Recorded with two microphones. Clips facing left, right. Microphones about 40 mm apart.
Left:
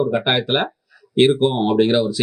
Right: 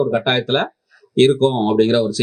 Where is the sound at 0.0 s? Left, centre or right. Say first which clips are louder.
Right 1 dB; centre.